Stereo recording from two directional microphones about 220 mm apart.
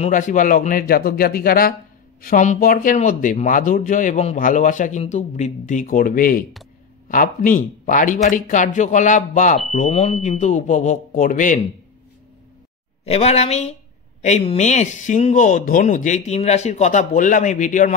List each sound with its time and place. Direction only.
0.0 s speech: 35° left (ahead or behind)
13.0 s a woman's voice: 30° left (ahead or behind)